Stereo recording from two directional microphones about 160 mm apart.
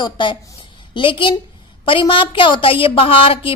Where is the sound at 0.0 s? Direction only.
30° left (ahead or behind).